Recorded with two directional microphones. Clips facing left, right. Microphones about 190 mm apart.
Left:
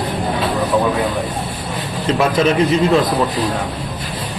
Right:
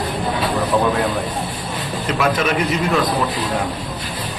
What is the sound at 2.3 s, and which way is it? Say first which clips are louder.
Speech: left 5 dB; 25° left (ahead or behind).